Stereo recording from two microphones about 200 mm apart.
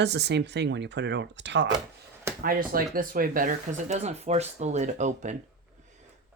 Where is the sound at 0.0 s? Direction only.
60° right (ahead or behind).